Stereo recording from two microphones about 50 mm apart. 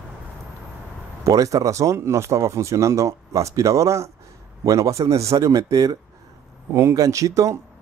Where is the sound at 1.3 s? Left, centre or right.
Right.